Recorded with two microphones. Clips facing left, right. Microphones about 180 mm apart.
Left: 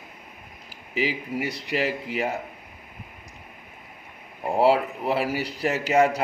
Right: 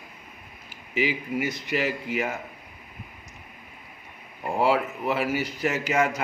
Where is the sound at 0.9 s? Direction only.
35° left (ahead or behind).